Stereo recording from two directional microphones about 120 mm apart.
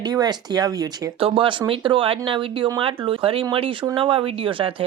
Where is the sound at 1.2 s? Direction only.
45° right (ahead or behind).